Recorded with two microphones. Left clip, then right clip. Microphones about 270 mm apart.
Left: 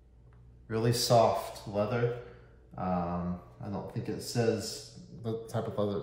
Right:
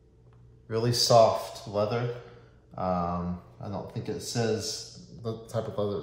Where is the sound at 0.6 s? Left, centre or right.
Centre.